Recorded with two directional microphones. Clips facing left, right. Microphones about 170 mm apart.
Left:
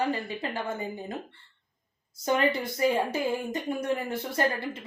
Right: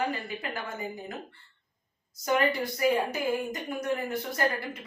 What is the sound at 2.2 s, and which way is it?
Speech, 25° left (ahead or behind).